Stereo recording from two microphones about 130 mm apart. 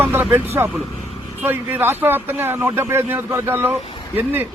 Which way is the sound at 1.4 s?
15° right (ahead or behind).